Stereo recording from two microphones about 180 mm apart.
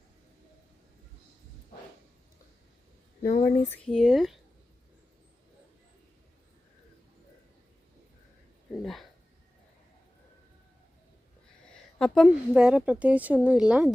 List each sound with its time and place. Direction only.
3.2 s speech: 40° left (ahead or behind)
3.8 s a woman's voice: centre (ahead or behind)
8.8 s a sound: centre (ahead or behind)
11.9 s a woman's voice: centre (ahead or behind)